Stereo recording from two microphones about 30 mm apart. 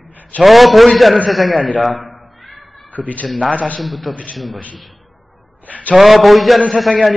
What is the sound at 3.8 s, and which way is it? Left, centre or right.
Speech, centre.